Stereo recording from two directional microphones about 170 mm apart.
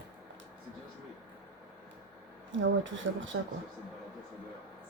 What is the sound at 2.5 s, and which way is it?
Speech, 90° right.